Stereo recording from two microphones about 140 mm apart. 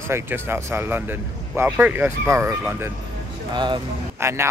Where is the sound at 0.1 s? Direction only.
15° right (ahead or behind).